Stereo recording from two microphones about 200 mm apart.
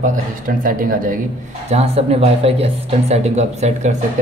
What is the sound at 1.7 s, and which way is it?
A man's voice, 30° right (ahead or behind).